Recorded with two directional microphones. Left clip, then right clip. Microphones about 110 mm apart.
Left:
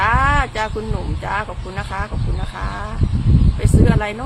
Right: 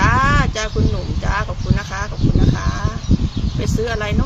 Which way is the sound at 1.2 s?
30° left (ahead or behind).